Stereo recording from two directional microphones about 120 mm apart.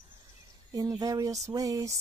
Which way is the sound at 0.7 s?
30° right (ahead or behind).